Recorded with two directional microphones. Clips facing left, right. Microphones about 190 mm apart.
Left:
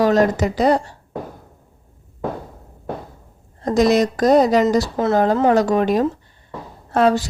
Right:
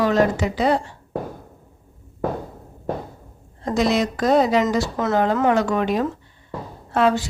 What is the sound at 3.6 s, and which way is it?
Speech, 40° left (ahead or behind).